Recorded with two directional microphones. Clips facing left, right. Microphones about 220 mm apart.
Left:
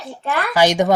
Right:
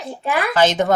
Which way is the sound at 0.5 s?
15° left (ahead or behind).